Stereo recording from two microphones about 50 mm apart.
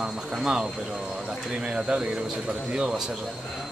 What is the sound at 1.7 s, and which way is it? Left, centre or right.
Speech, centre.